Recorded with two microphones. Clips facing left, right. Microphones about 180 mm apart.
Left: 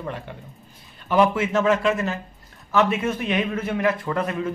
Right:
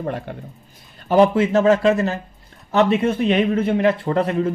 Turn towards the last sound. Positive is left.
turn(degrees=-35)  # may be behind; listen again after turning